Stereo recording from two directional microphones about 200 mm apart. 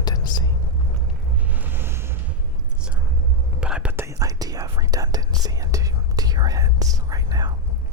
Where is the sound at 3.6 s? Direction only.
5° right (ahead or behind).